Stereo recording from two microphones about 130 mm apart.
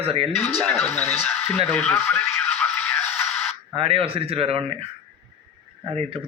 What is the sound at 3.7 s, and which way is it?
A man's voice, 45° right (ahead or behind).